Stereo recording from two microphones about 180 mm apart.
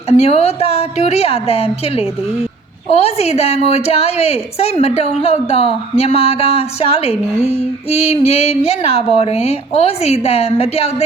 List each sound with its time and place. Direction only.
0.1 s a woman's voice: 35° left (ahead or behind)